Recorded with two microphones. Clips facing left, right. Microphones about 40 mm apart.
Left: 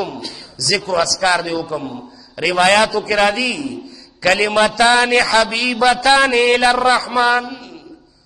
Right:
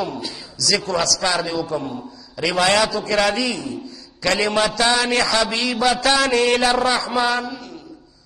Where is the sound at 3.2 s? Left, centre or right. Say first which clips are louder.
Left 3 dB; left.